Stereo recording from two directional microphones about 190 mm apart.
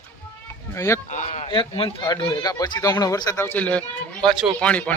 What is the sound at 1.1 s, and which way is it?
Speech, 40° left (ahead or behind).